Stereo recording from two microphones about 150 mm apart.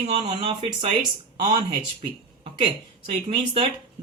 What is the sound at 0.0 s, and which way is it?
Speech, 40° right (ahead or behind).